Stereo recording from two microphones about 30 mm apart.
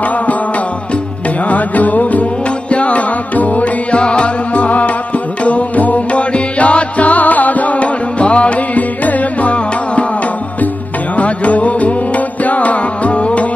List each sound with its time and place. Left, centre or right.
1.5 s music: left
2.7 s music: left
4.0 s music: left
4.6 s music: left
6.1 s music: left
8.7 s music: left
11.1 s music: left